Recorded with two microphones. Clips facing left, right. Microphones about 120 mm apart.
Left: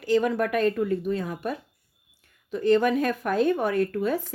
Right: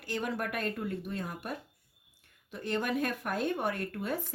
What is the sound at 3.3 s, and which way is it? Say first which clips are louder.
A woman's voice: left 10 dB; 90° left.